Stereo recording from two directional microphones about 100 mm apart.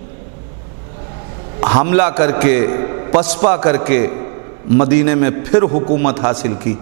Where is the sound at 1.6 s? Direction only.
15° right (ahead or behind).